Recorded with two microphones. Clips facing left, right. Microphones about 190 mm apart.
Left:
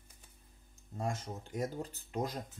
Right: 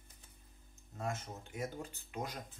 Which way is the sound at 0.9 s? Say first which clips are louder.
Left 3 dB; 30° left (ahead or behind).